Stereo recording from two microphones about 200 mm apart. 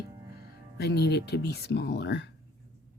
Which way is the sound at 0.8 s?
55° left (ahead or behind).